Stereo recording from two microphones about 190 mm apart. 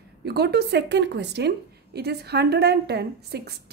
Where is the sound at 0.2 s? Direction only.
60° right (ahead or behind).